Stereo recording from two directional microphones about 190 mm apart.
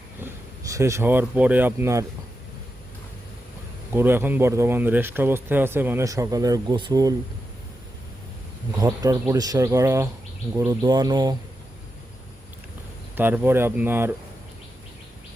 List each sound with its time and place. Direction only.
0.7 s speech: 15° right (ahead or behind)
3.9 s speech: 10° right (ahead or behind)
8.7 s speech: 20° right (ahead or behind)
10.5 s insect: 15° right (ahead or behind)
13.1 s speech: 10° right (ahead or behind)